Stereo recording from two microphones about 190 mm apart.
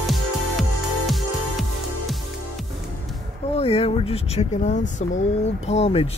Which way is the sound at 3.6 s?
30° left (ahead or behind).